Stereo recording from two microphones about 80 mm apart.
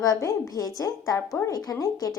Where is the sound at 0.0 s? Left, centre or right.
Left.